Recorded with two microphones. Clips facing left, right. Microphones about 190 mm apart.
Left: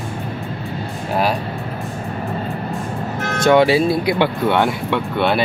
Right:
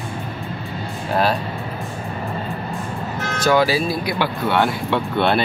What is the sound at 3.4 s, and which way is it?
Speech, 25° left (ahead or behind).